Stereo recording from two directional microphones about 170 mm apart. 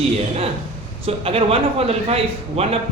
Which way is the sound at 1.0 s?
35° right (ahead or behind).